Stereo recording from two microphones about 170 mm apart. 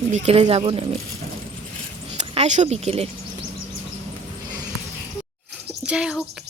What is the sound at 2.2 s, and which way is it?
Speech, 40° right (ahead or behind).